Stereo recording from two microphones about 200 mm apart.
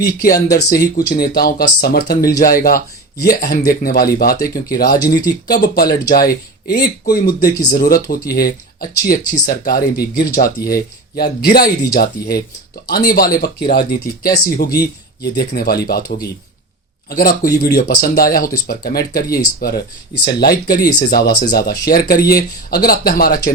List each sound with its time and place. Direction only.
0.0 s speech: 45° left (ahead or behind)
0.3 s speech: 15° left (ahead or behind)
0.9 s speech: 50° left (ahead or behind)